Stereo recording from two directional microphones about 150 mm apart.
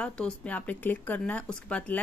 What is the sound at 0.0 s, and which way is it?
A woman's voice, 5° left (ahead or behind).